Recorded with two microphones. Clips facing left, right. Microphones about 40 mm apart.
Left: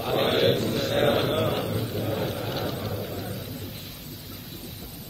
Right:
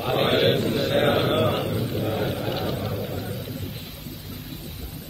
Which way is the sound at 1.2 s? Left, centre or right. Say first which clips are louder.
Right 3 dB; centre.